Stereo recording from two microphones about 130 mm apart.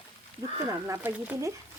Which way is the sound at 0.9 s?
20° right (ahead or behind).